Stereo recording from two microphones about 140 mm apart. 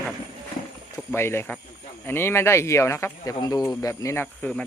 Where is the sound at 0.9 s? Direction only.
15° left (ahead or behind).